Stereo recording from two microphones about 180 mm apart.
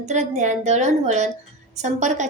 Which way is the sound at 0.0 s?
40° right (ahead or behind).